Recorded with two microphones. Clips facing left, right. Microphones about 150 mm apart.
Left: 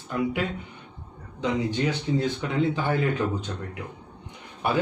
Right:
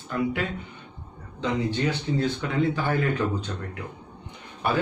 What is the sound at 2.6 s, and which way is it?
Speech, 20° left (ahead or behind).